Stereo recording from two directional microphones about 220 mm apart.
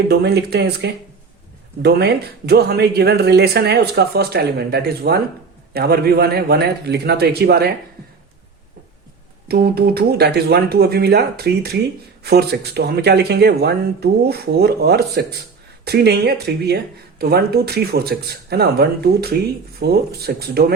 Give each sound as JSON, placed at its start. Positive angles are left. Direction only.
{"t": 0.1, "sound": "speech", "side_deg": -50}
{"t": 9.5, "sound": "speech", "side_deg": -45}